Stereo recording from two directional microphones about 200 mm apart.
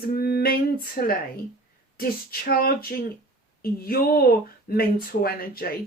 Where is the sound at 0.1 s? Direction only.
50° left (ahead or behind).